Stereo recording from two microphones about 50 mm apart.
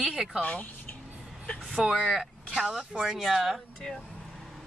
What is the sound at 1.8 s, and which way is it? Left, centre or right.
A woman's voice, centre.